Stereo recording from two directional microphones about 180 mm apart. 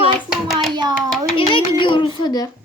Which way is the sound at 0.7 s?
25° right (ahead or behind).